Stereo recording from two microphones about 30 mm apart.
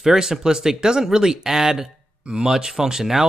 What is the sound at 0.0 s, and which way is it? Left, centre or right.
Speech, right.